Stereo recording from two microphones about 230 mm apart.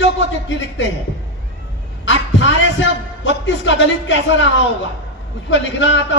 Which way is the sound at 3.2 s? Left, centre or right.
Left.